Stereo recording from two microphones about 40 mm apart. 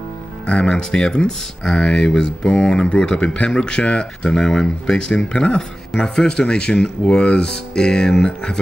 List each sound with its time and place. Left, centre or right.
0.5 s speech: left